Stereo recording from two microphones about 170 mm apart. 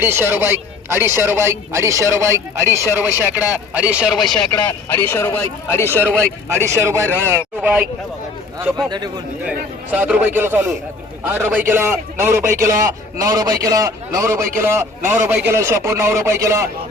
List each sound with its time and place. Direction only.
0.0 s a man's voice: 15° right (ahead or behind)
4.9 s speech: 15° left (ahead or behind)
6.5 s a man's voice: 15° right (ahead or behind)
9.4 s a man's voice: 5° right (ahead or behind)